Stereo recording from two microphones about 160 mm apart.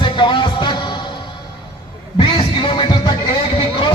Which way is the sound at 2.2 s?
30° left (ahead or behind).